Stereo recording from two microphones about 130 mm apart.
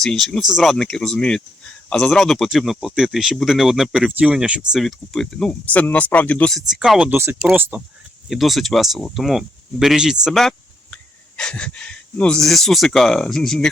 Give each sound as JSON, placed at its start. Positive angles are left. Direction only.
{"t": 0.0, "sound": "speech", "side_deg": 5}
{"t": 7.1, "sound": "speech", "side_deg": -20}
{"t": 8.3, "sound": "speech", "side_deg": 0}